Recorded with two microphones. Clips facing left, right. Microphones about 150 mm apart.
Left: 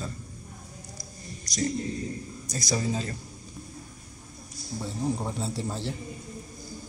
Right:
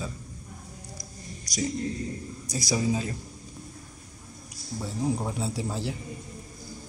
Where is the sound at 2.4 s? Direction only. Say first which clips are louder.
Right 2 dB; 10° right (ahead or behind).